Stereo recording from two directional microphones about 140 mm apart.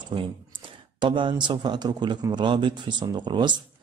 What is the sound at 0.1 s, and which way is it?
Speech, 35° right (ahead or behind).